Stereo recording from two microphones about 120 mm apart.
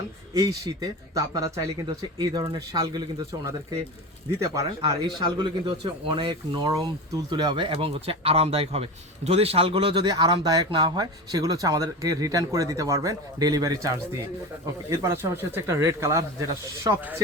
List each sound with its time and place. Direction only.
0.3 s speech: 30° right (ahead or behind)
4.3 s speech: 25° right (ahead or behind)
5.4 s speech: 40° right (ahead or behind)
9.7 s speech: 40° right (ahead or behind)